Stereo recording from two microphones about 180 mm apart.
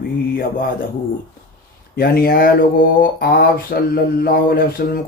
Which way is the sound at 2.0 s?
55° left (ahead or behind).